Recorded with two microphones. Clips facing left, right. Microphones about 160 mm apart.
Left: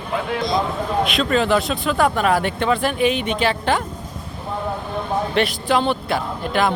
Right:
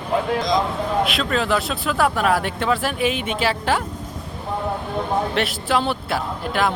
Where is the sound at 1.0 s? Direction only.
Centre (ahead or behind).